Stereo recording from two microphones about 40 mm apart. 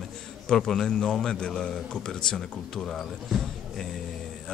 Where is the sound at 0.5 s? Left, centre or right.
Centre.